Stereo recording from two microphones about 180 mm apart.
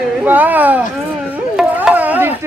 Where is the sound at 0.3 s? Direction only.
10° right (ahead or behind).